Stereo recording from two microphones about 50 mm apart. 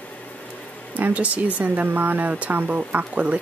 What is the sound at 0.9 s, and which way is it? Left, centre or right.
Speech, right.